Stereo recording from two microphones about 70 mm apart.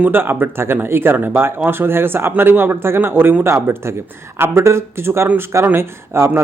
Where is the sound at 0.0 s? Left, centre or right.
Right.